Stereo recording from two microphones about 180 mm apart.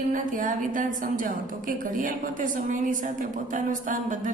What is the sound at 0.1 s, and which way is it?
Speech, 45° right (ahead or behind).